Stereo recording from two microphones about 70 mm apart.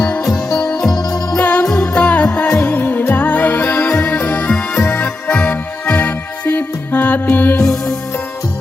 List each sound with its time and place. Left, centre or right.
0.6 s organ: centre
0.9 s music: left
1.4 s jingle bell: centre
1.7 s music: centre; by 3.8 s left
4.0 s music: centre